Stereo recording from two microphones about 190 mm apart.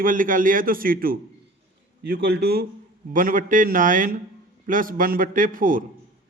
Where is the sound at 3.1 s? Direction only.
45° right (ahead or behind).